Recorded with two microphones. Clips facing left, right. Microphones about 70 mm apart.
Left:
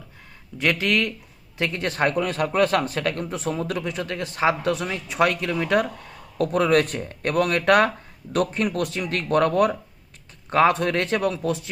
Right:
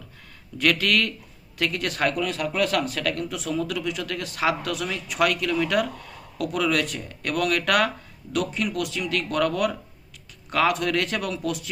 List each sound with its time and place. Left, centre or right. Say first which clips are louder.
0.6 s a man's voice: even; left